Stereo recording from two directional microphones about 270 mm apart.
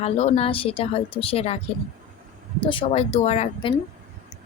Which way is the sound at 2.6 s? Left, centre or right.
Centre.